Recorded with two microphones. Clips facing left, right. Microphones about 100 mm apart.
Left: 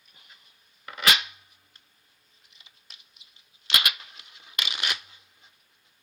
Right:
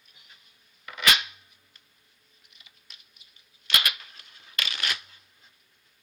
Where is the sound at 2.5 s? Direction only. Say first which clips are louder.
Left 1 dB; 30° left (ahead or behind).